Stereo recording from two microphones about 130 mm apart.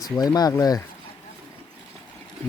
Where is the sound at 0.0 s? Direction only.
30° left (ahead or behind).